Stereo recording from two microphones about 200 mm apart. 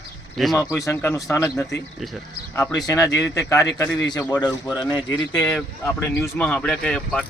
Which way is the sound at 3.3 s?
15° left (ahead or behind).